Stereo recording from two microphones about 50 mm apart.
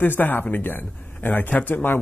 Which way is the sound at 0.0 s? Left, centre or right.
Left.